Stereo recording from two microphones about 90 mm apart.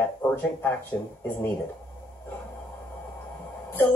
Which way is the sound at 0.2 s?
25° left (ahead or behind).